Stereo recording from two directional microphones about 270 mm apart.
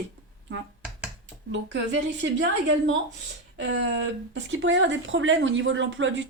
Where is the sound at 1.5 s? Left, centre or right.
Right.